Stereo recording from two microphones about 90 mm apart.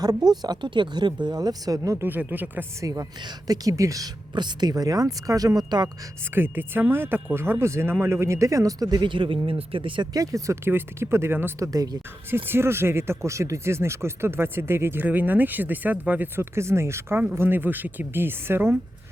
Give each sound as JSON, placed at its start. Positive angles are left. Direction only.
{"t": 0.0, "sound": "speech", "side_deg": -45}
{"t": 2.0, "sound": "speech", "side_deg": -20}
{"t": 2.8, "sound": "speech", "side_deg": -40}
{"t": 4.4, "sound": "speech", "side_deg": -50}
{"t": 6.3, "sound": "speech", "side_deg": -25}
{"t": 10.1, "sound": "speech", "side_deg": -40}
{"t": 11.6, "sound": "speech", "side_deg": -40}
{"t": 12.5, "sound": "speech", "side_deg": -25}